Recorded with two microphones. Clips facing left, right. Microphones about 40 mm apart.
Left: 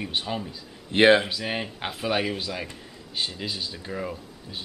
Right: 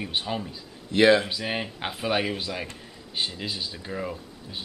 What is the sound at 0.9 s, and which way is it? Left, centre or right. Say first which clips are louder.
Speech: left 1 dB; left.